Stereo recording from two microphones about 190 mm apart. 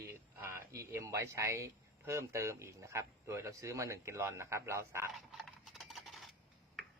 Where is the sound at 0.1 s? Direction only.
15° right (ahead or behind).